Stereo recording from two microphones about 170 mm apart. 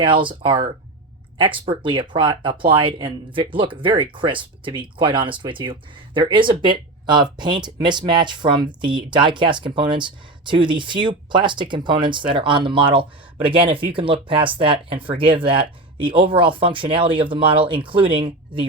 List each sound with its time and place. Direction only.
0.0 s speech: 30° right (ahead or behind)